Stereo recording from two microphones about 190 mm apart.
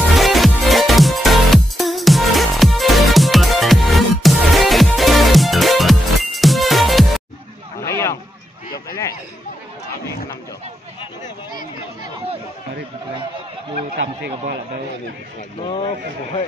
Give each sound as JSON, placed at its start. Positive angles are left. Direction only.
{"t": 0.1, "sound": "music", "side_deg": 0}
{"t": 7.8, "sound": "a sound", "side_deg": 15}
{"t": 15.6, "sound": "speech", "side_deg": 30}